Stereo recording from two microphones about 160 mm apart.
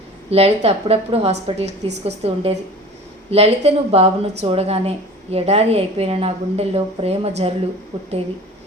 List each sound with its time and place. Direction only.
0.3 s a woman's voice: 40° right (ahead or behind)